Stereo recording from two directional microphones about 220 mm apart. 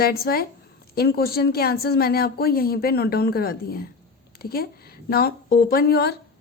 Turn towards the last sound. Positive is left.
turn(degrees=45)  # may be behind; listen again after turning